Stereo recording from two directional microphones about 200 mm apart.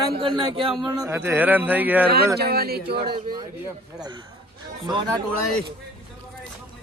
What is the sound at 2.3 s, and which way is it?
Speech, 50° right (ahead or behind).